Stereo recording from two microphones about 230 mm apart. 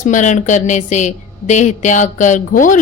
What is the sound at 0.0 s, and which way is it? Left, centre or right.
A woman's voice, left.